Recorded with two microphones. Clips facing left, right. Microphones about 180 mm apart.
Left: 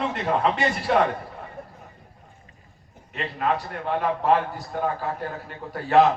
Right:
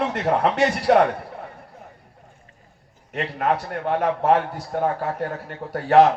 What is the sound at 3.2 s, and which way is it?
A man's voice, 70° right (ahead or behind).